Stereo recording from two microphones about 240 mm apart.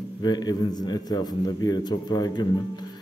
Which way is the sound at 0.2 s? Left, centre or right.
Centre.